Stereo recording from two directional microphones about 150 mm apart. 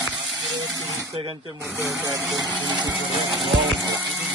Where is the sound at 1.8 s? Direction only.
20° right (ahead or behind).